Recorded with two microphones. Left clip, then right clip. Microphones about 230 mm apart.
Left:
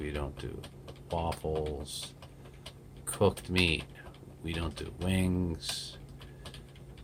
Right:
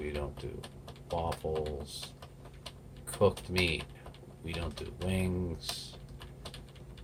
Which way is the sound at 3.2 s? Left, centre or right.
Left.